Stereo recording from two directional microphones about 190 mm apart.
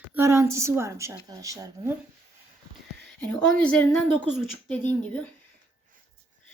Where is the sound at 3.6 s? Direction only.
5° left (ahead or behind).